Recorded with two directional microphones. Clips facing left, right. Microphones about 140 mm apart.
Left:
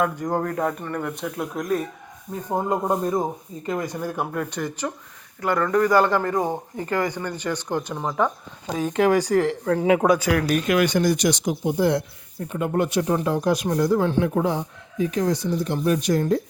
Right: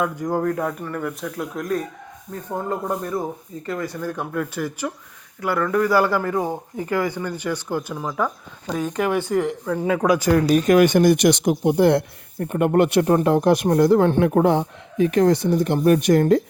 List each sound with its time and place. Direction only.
0.0 s speech: 5° right (ahead or behind)
2.6 s speech: 20° left (ahead or behind)
4.5 s speech: 5° right (ahead or behind)
8.9 s speech: 90° left
10.5 s speech: 45° right (ahead or behind); by 16.4 s 60° right (ahead or behind)